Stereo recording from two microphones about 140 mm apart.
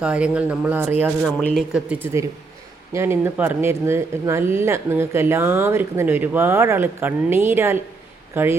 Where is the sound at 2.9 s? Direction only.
20° right (ahead or behind).